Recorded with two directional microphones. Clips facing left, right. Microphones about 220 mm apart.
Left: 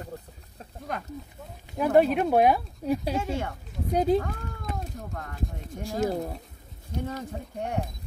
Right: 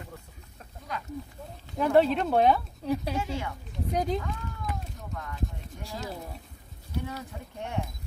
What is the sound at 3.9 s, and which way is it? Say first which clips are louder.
Speech: left 6 dB; 30° left (ahead or behind).